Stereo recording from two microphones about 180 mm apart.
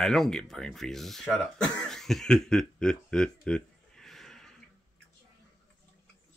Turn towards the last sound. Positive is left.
turn(degrees=0)  # may be behind; listen again after turning